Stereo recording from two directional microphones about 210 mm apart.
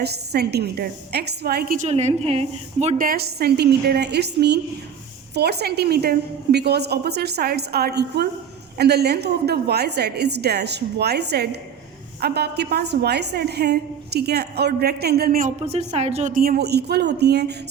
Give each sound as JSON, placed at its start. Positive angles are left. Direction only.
{"t": 0.0, "sound": "a woman's voice", "side_deg": -50}
{"t": 3.1, "sound": "a woman's voice", "side_deg": -50}
{"t": 15.6, "sound": "a woman's voice", "side_deg": -30}